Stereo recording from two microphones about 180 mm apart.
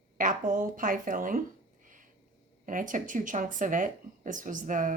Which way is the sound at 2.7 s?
45° right (ahead or behind).